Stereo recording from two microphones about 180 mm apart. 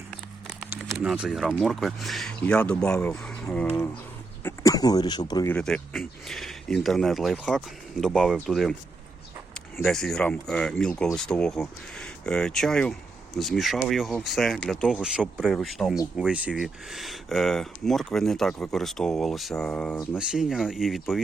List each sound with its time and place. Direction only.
0.4 s a sound: 5° right (ahead or behind)
0.8 s speech: centre (ahead or behind)
4.4 s speech: 20° left (ahead or behind)
5.5 s speech: 5° left (ahead or behind)